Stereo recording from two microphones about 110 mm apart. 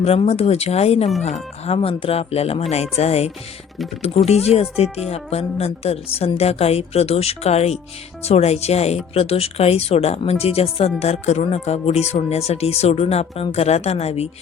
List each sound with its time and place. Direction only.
0.0 s speech: 65° left (ahead or behind)
4.4 s speech: 65° left (ahead or behind)
9.1 s speech: 60° left (ahead or behind)
11.0 s speech: 80° left